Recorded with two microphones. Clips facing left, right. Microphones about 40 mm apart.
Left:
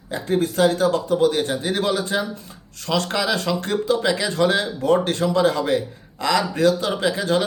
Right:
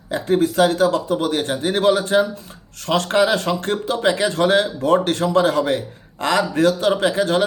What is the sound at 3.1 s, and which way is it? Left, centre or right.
Speech, right.